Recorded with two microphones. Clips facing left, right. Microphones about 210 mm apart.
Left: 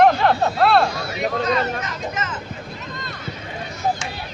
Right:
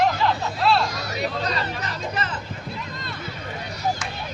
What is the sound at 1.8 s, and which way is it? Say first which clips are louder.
Vehicle: left 1 dB; 35° right (ahead or behind).